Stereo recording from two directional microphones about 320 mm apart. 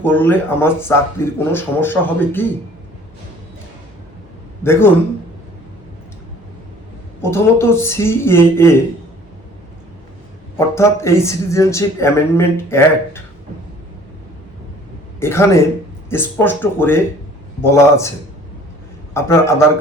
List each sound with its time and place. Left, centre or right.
0.0 s speech: centre
4.6 s speech: centre
7.2 s speech: centre
10.8 s speech: centre
15.2 s speech: centre
19.1 s speech: centre